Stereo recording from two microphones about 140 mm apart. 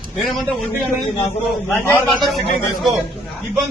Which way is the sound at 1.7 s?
15° left (ahead or behind).